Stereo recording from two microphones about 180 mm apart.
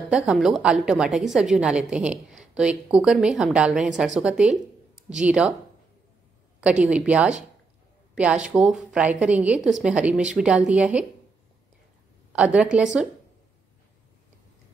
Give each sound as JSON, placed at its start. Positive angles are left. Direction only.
{"t": 0.1, "sound": "a woman's voice", "side_deg": -5}
{"t": 6.6, "sound": "a woman's voice", "side_deg": -5}
{"t": 12.3, "sound": "a woman's voice", "side_deg": -5}